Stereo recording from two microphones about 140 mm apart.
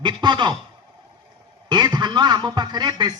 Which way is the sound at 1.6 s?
30° right (ahead or behind).